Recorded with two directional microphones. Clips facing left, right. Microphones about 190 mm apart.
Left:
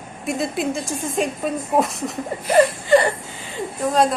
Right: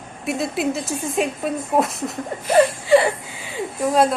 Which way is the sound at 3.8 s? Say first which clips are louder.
Right 1 dB; 10° right (ahead or behind).